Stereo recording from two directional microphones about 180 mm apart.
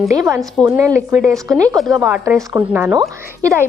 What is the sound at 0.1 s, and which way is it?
A woman's voice, 15° right (ahead or behind).